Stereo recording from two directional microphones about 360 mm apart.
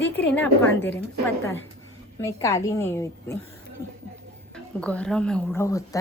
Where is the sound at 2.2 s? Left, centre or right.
Centre.